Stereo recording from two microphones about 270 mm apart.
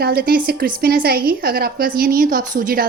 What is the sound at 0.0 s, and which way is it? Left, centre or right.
Speech, right.